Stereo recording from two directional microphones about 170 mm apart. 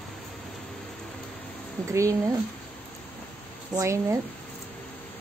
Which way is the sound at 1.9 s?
20° right (ahead or behind).